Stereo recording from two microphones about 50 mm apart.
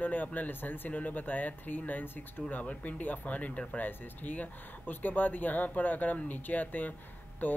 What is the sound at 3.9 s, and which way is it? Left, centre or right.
Speech, left.